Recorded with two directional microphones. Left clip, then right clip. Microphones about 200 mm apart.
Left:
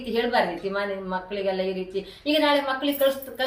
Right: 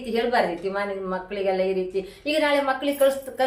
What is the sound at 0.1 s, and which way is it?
A woman's voice, 20° right (ahead or behind).